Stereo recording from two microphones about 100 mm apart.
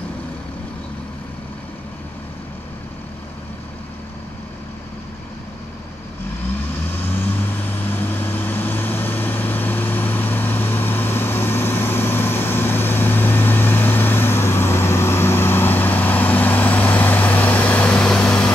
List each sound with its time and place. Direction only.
7.8 s vehicle: 20° left (ahead or behind)